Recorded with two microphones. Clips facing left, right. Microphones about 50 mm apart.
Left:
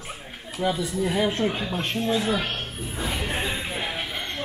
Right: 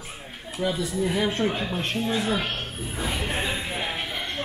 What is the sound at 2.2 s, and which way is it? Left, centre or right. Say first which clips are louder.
Snake: left 1 dB; centre.